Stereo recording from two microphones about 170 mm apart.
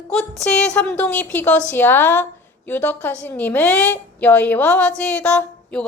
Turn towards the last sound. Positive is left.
turn(degrees=5)  # may be behind; listen again after turning